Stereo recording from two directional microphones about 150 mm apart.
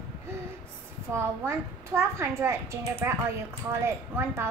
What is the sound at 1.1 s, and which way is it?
A child's voice, 15° right (ahead or behind).